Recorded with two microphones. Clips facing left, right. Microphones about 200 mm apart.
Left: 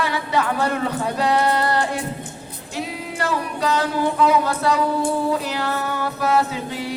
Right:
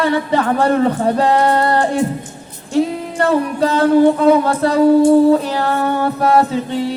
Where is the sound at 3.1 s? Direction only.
50° right (ahead or behind).